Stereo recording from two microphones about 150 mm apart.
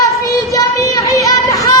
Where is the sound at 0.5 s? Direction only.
25° left (ahead or behind).